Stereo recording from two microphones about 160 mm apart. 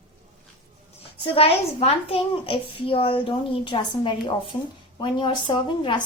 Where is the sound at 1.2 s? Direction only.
35° left (ahead or behind).